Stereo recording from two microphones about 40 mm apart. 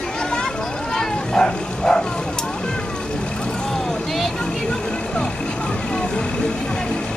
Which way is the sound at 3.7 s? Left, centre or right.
Centre.